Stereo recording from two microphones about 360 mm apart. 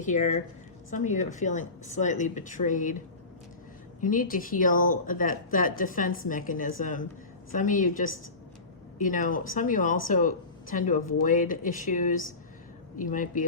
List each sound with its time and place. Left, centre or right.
0.0 s speech: centre
4.0 s speech: left